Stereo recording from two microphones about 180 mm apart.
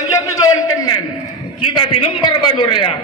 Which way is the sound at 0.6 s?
20° left (ahead or behind).